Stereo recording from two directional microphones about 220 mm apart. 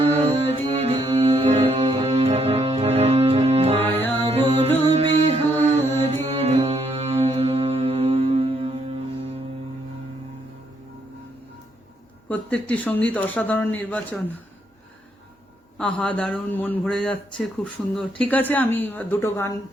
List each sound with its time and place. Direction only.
0.0 s music: 30° right (ahead or behind)
3.8 s music: 10° left (ahead or behind)
4.3 s music: 25° right (ahead or behind)
12.3 s a man's voice: 5° left (ahead or behind)
15.8 s a man's voice: 5° left (ahead or behind)